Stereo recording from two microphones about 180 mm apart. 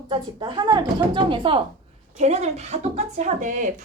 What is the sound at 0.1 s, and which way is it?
A woman's voice, 25° right (ahead or behind).